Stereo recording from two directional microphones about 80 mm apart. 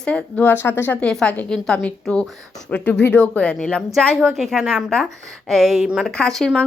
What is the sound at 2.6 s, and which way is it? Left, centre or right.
A woman's voice, left.